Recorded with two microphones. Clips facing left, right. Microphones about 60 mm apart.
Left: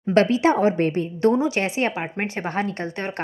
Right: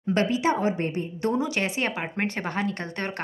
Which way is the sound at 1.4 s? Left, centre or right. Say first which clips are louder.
Left 4 dB; left.